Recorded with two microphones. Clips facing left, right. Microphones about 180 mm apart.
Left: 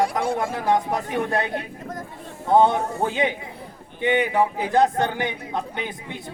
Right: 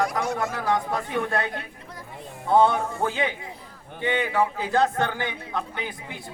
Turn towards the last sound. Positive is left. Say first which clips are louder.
# left 3 dB
turn(degrees=20)  # may be behind; listen again after turning